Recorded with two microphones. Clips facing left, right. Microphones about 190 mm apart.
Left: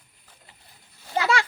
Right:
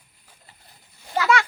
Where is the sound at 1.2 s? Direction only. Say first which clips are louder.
Right 3 dB; 30° left (ahead or behind).